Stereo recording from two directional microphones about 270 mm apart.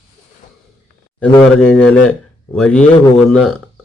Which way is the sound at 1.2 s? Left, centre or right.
Centre.